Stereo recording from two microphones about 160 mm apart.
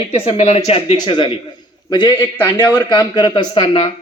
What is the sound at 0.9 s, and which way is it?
A man's voice, 30° left (ahead or behind).